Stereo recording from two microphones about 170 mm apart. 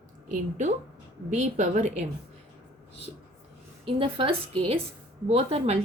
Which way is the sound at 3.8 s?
35° right (ahead or behind).